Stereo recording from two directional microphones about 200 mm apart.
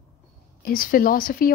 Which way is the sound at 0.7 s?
45° left (ahead or behind).